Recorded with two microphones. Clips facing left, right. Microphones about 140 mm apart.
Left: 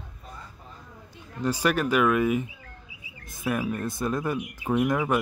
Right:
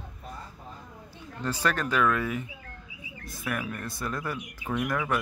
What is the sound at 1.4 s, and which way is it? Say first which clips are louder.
Speech: left 4 dB; 10° left (ahead or behind).